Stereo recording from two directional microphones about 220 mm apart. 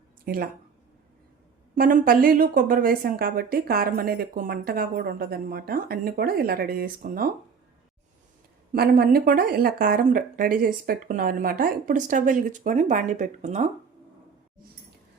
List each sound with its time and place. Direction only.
0.3 s speech: 45° right (ahead or behind)
1.7 s speech: 40° right (ahead or behind)
8.7 s speech: 45° right (ahead or behind)